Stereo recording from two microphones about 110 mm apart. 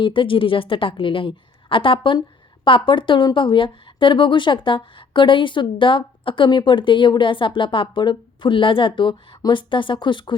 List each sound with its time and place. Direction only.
0.0 s speech: 50° left (ahead or behind)